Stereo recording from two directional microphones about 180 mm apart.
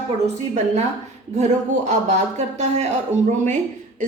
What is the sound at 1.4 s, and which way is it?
Speech, 40° right (ahead or behind).